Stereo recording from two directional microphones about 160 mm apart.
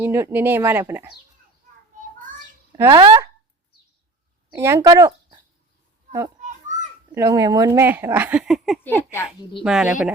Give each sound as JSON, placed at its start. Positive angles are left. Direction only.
{"t": 0.0, "sound": "speech", "side_deg": -15}
{"t": 2.7, "sound": "speech", "side_deg": -15}
{"t": 4.5, "sound": "speech", "side_deg": -15}
{"t": 6.4, "sound": "children playing", "side_deg": -50}
{"t": 7.1, "sound": "speech", "side_deg": -20}
{"t": 8.8, "sound": "speech", "side_deg": 10}
{"t": 9.4, "sound": "speech", "side_deg": 30}
{"t": 9.6, "sound": "speech", "side_deg": -5}